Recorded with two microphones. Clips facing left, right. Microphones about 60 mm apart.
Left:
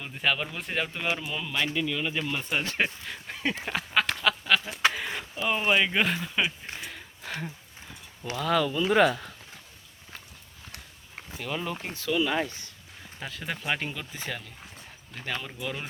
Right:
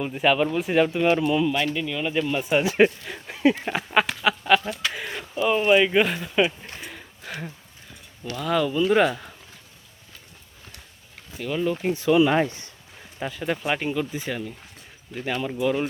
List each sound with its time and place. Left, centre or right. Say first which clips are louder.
0.0 s speech: right 8 dB; centre
4.9 s speech: even; centre
11.3 s speech: right 7 dB; centre
11.8 s speech: right 10 dB; centre
13.1 s speech: right 8 dB; centre